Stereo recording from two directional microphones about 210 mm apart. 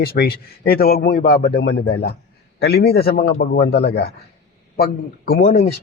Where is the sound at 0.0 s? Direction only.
45° left (ahead or behind).